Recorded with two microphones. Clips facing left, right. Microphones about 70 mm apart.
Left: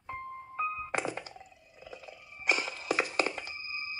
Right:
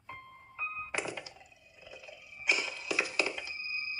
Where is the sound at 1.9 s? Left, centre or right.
Left.